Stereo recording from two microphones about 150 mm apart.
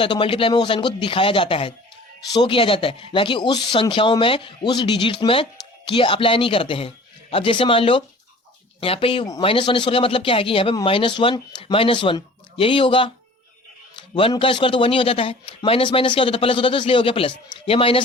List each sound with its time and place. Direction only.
0.0 s speech: 35° left (ahead or behind)
14.1 s speech: 35° left (ahead or behind)